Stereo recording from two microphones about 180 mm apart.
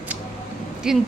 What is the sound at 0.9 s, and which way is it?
Speech, 5° right (ahead or behind).